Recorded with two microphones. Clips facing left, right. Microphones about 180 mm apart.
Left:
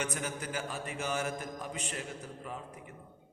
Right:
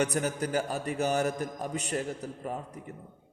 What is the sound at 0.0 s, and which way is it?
A man's voice, 40° right (ahead or behind).